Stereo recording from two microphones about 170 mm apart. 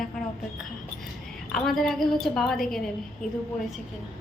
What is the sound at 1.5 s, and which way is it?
A woman's voice, centre (ahead or behind).